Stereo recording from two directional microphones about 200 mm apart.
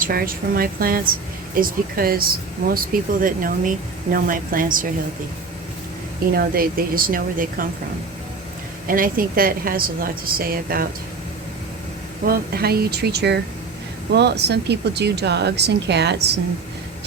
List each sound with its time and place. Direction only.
0.0 s speech: 45° right (ahead or behind)
6.3 s speech: 50° right (ahead or behind)
8.9 s speech: 45° right (ahead or behind)
12.2 s a woman's voice: 50° right (ahead or behind)